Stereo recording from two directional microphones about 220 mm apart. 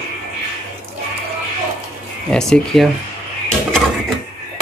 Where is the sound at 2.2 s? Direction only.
5° left (ahead or behind).